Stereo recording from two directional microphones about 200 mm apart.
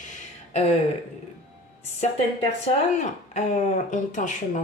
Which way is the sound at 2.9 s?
35° left (ahead or behind).